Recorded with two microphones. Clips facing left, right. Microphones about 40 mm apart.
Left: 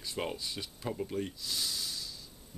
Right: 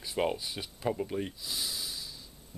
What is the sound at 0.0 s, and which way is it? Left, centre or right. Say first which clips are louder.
Speech: right 5 dB; centre.